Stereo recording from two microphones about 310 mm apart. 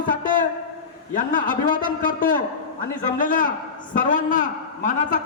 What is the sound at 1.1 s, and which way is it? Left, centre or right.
A man's voice, left.